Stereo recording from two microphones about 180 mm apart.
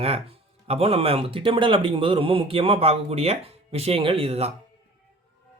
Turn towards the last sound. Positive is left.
turn(degrees=-35)  # may be behind; listen again after turning